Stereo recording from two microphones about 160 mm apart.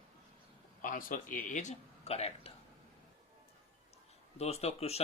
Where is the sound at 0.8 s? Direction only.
60° left (ahead or behind); by 2.5 s 40° left (ahead or behind).